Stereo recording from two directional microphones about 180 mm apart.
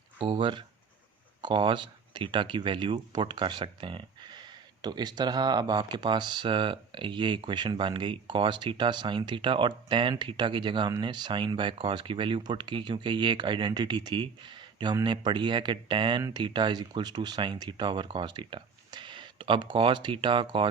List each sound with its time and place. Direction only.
0.2 s speech: 30° right (ahead or behind)